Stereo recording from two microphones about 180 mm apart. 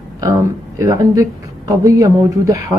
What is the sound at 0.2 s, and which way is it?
Speech, 15° right (ahead or behind).